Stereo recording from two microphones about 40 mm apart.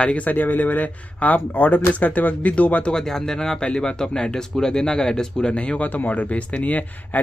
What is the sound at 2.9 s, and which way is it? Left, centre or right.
Speech, centre.